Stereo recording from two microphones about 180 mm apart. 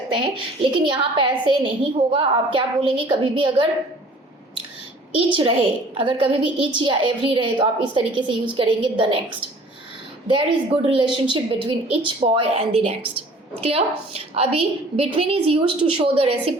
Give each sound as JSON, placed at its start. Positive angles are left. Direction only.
{"t": 0.2, "sound": "a woman's voice", "side_deg": -25}
{"t": 5.1, "sound": "a woman's voice", "side_deg": -30}
{"t": 10.8, "sound": "a woman's voice", "side_deg": -25}